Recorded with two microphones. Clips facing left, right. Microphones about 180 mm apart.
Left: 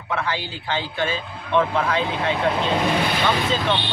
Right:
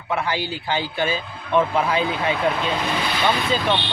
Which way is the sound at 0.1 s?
10° right (ahead or behind).